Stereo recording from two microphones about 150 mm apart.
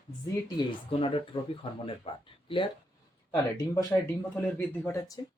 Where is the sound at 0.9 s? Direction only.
40° left (ahead or behind).